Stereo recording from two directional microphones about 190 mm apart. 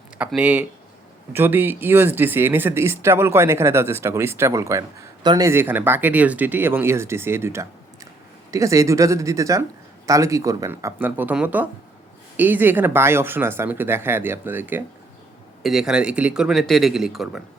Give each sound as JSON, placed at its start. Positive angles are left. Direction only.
{"t": 0.2, "sound": "speech", "side_deg": -5}